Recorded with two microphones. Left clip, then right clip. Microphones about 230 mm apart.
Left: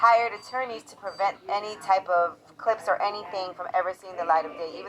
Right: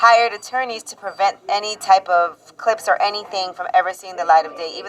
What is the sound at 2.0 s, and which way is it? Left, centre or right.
A woman's voice, right.